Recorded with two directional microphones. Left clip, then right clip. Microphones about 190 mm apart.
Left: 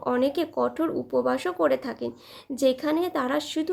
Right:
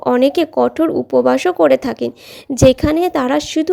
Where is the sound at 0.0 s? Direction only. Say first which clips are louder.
Right 11 dB; 40° right (ahead or behind).